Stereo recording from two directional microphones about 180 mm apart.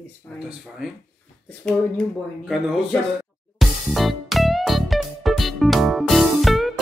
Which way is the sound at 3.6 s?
Centre (ahead or behind).